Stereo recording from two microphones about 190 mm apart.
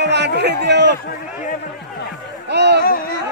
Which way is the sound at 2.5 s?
65° right (ahead or behind).